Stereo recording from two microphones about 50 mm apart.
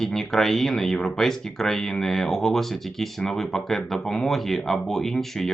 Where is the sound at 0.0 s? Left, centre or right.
Centre.